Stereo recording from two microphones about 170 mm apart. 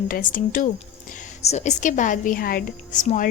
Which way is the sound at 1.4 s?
40° left (ahead or behind).